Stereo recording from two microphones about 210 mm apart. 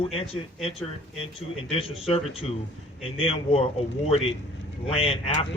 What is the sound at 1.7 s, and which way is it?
Speech, 25° left (ahead or behind).